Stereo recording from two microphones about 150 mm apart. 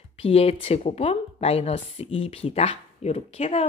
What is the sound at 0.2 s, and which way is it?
A woman's voice, 40° left (ahead or behind).